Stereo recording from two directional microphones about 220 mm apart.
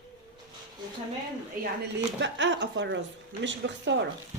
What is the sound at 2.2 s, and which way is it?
Speech, 55° right (ahead or behind).